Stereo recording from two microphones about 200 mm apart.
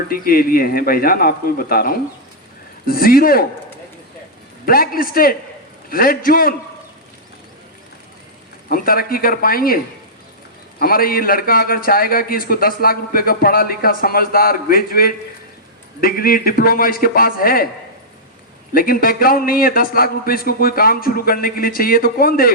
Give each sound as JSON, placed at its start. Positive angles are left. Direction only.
{"t": 0.1, "sound": "a man's voice", "side_deg": 45}
{"t": 4.6, "sound": "a man's voice", "side_deg": 45}
{"t": 8.7, "sound": "a man's voice", "side_deg": 45}
{"t": 18.7, "sound": "a man's voice", "side_deg": 45}